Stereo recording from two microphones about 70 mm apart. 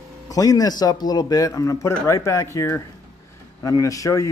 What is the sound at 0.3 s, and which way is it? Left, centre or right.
Speech, left.